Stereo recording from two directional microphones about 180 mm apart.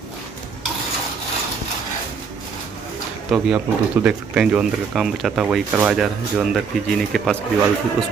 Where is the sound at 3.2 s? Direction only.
5° right (ahead or behind).